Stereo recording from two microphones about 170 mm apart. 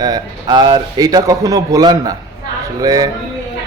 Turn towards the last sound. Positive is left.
turn(degrees=-20)  # may be behind; listen again after turning